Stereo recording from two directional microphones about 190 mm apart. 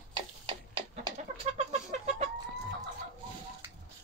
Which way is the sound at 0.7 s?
30° right (ahead or behind).